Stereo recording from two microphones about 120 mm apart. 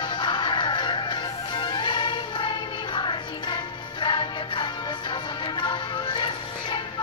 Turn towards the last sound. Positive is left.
turn(degrees=40)  # may be behind; listen again after turning